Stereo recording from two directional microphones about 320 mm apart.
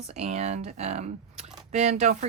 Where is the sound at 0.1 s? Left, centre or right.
Right.